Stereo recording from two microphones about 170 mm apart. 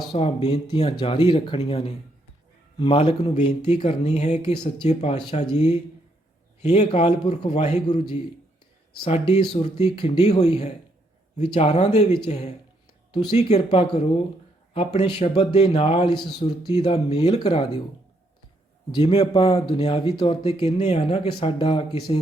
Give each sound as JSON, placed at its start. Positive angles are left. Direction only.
{"t": 0.1, "sound": "speech", "side_deg": 35}
{"t": 4.5, "sound": "speech", "side_deg": 25}
{"t": 4.9, "sound": "speech", "side_deg": 40}
{"t": 9.4, "sound": "speech", "side_deg": 35}
{"t": 13.1, "sound": "speech", "side_deg": 30}
{"t": 19.0, "sound": "speech", "side_deg": 30}